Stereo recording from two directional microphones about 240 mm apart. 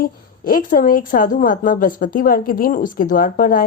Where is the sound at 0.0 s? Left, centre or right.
Left.